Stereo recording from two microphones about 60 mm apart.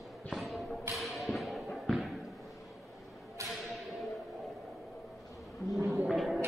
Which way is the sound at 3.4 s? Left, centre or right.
Right.